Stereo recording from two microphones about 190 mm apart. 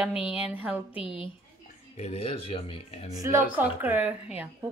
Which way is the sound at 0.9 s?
30° left (ahead or behind).